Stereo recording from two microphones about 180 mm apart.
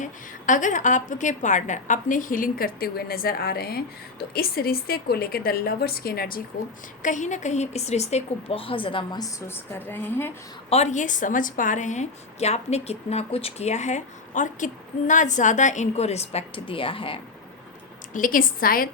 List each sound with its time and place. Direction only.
0.0 s a woman's voice: 45° left (ahead or behind)
7.0 s a woman's voice: 45° left (ahead or behind); by 10.3 s 10° left (ahead or behind)
10.7 s a woman's voice: 40° left (ahead or behind)
18.1 s a woman's voice: 50° left (ahead or behind)